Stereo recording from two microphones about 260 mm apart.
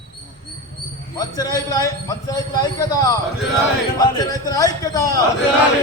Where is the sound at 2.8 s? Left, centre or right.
Centre.